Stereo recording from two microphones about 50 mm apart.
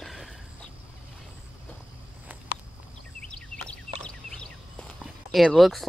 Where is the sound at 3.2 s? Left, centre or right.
Centre.